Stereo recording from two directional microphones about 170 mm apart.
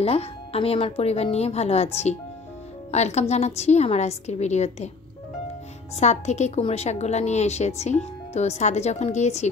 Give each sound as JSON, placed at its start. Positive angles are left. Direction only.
{"t": 0.0, "sound": "a woman's voice", "side_deg": 35}
{"t": 5.9, "sound": "a woman's voice", "side_deg": 40}